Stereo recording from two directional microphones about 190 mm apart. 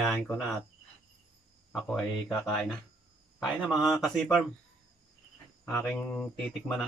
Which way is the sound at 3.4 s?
Centre (ahead or behind).